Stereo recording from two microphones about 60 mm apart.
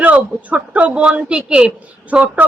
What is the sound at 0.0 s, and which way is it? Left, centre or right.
A woman's voice, right.